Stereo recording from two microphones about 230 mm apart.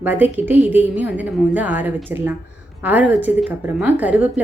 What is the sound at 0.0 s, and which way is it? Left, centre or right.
A woman's voice, centre.